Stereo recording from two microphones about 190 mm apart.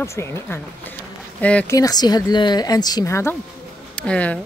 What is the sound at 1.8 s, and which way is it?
A woman's voice, 20° left (ahead or behind).